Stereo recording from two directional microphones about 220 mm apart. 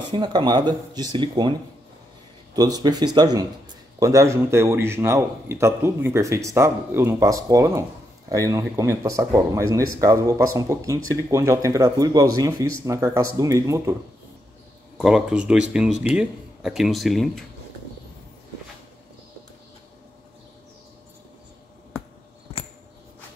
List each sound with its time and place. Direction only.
0.1 s speech: 20° right (ahead or behind)
2.5 s a man's voice: 20° right (ahead or behind)
15.0 s speech: centre (ahead or behind)